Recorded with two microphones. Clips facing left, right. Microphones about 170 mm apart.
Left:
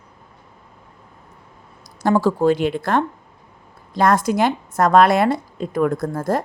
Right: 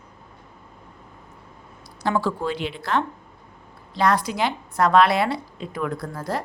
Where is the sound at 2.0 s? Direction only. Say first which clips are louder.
Left 8 dB; 45° left (ahead or behind).